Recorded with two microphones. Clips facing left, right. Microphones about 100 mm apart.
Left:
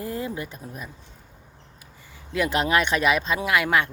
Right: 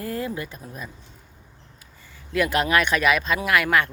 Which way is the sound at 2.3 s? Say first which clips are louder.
Right 1 dB; 20° left (ahead or behind).